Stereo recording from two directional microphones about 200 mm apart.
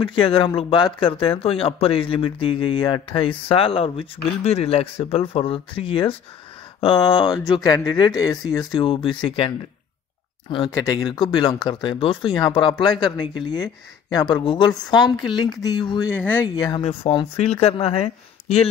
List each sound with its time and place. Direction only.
0.0 s speech: 25° left (ahead or behind)
10.5 s speech: 20° left (ahead or behind)
16.1 s speech: 10° left (ahead or behind)
16.5 s speech: 20° left (ahead or behind)